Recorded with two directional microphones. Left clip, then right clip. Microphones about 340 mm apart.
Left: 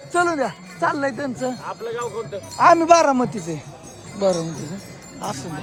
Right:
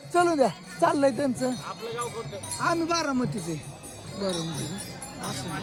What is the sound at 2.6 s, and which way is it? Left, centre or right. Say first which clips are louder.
Speech: left 14 dB; centre.